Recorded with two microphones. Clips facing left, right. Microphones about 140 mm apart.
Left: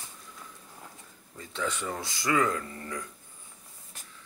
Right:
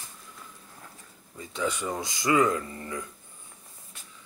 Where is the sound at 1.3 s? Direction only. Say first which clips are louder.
Right 3 dB; 15° right (ahead or behind).